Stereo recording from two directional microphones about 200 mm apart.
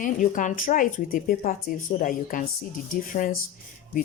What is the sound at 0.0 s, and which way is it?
Speech, 40° left (ahead or behind).